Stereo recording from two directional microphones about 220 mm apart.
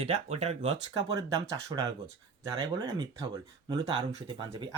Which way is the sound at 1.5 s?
15° right (ahead or behind).